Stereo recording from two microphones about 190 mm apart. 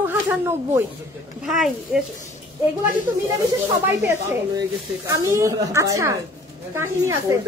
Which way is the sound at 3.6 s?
15° right (ahead or behind).